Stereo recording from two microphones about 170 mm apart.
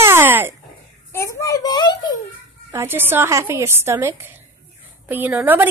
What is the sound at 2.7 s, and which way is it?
A woman's voice, 15° right (ahead or behind).